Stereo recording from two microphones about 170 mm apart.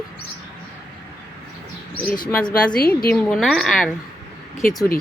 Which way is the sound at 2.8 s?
65° left (ahead or behind).